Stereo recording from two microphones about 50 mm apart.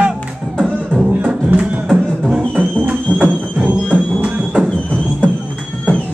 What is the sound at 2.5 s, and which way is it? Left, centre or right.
Music, right.